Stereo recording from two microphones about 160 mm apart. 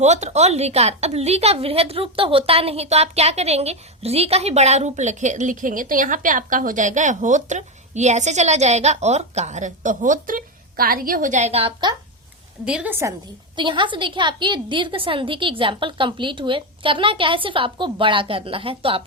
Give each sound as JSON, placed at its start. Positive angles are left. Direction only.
{"t": 0.0, "sound": "a woman's voice", "side_deg": -45}
{"t": 12.6, "sound": "a woman's voice", "side_deg": -5}
{"t": 13.6, "sound": "a woman's voice", "side_deg": -30}